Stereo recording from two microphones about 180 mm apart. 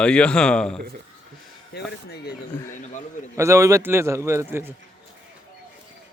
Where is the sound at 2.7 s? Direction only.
45° left (ahead or behind).